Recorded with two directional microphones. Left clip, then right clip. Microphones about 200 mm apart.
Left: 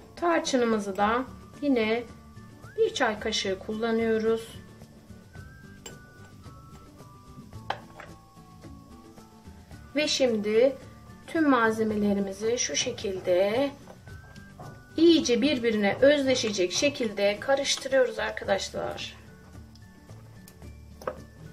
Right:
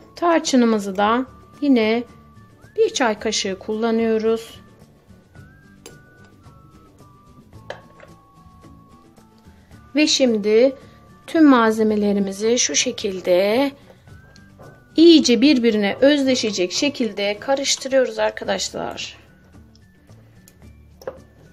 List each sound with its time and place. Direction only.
0.1 s speech: 45° right (ahead or behind)
9.9 s speech: 45° right (ahead or behind)
15.0 s speech: 50° right (ahead or behind)